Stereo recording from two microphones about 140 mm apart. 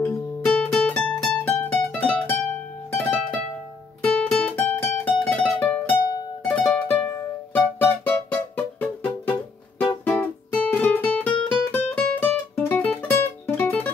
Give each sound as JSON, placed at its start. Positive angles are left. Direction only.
{"t": 0.0, "sound": "music", "side_deg": 15}
{"t": 10.7, "sound": "guitar", "side_deg": 10}
{"t": 11.4, "sound": "music", "side_deg": 15}